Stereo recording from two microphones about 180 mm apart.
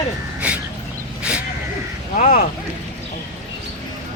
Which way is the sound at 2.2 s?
50° left (ahead or behind).